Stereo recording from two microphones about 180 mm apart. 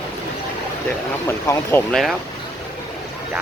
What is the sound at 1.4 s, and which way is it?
Speech, 15° left (ahead or behind).